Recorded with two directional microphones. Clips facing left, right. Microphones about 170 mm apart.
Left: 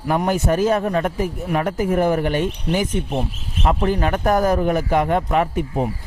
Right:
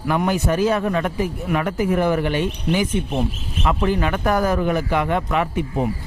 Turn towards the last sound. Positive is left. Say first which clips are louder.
# left 2 dB
turn(degrees=40)  # may be behind; listen again after turning